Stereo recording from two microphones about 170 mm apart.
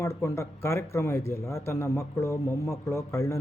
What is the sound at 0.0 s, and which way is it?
Speech, 15° left (ahead or behind).